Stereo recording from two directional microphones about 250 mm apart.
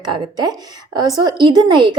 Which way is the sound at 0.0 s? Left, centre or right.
Centre.